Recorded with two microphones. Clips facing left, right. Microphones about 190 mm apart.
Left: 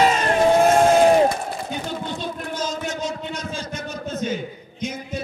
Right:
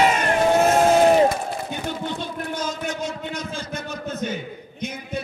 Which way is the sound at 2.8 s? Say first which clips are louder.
Left 1 dB; 55° right (ahead or behind).